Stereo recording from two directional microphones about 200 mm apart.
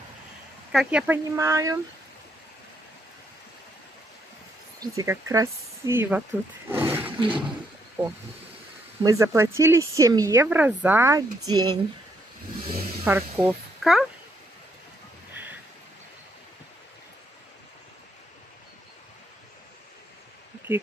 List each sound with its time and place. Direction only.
0.7 s speech: 5° right (ahead or behind)
4.7 s speech: 15° right (ahead or behind)
6.9 s roar: 10° right (ahead or behind)
7.2 s a sound: 25° right (ahead or behind)
9.0 s speech: 15° right (ahead or behind)
13.1 s speech: 10° right (ahead or behind)
20.7 s speech: 10° right (ahead or behind)